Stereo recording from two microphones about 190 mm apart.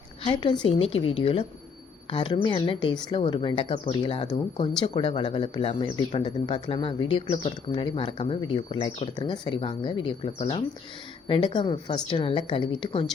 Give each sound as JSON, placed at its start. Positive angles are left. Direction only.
{"t": 0.2, "sound": "a woman's voice", "side_deg": 25}